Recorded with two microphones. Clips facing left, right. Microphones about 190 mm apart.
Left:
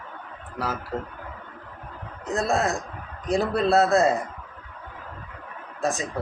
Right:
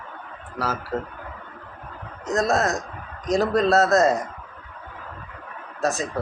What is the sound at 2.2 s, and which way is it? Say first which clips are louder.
A man's voice: right 2 dB; 40° right (ahead or behind).